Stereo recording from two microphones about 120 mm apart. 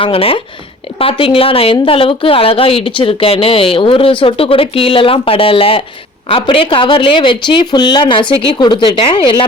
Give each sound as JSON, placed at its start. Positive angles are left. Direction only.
{"t": 0.0, "sound": "a woman's voice", "side_deg": 50}